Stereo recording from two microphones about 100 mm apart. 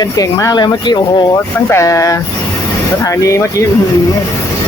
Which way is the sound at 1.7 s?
30° left (ahead or behind).